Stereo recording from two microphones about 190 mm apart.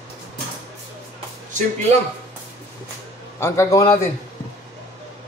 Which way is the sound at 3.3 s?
15° left (ahead or behind).